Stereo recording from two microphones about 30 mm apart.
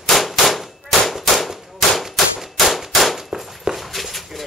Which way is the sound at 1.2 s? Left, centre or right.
Centre.